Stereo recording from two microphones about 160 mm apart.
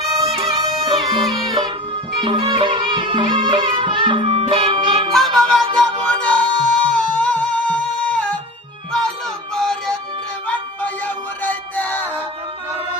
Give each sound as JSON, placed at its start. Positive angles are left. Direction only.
{"t": 0.9, "sound": "music", "side_deg": -35}
{"t": 5.1, "sound": "music", "side_deg": 0}
{"t": 9.6, "sound": "music", "side_deg": 0}
{"t": 11.4, "sound": "music", "side_deg": 10}